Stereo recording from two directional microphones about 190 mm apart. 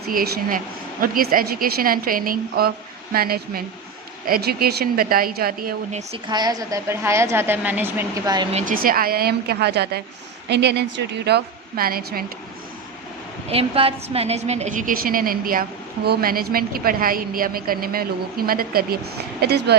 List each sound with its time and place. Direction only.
0.1 s a woman's voice: 50° right (ahead or behind)
6.2 s a woman's voice: 20° right (ahead or behind)
8.5 s a woman's voice: 45° right (ahead or behind)
13.5 s a woman's voice: 30° right (ahead or behind); by 19.7 s 60° right (ahead or behind)